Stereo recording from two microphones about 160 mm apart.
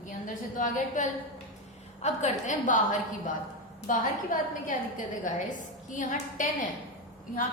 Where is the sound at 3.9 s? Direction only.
55° left (ahead or behind).